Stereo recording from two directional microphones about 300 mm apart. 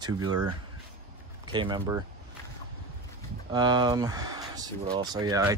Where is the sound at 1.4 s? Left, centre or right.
Centre.